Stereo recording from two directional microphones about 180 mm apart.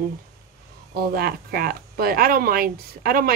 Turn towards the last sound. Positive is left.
turn(degrees=-55)  # may be behind; listen again after turning